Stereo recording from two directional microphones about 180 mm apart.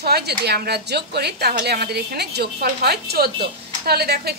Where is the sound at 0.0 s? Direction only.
65° right (ahead or behind).